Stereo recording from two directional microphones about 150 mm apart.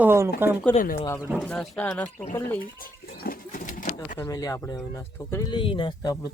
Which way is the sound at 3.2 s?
65° left (ahead or behind).